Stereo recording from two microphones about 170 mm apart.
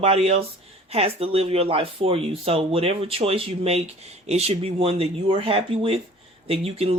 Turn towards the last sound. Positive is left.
turn(degrees=-35)  # may be behind; listen again after turning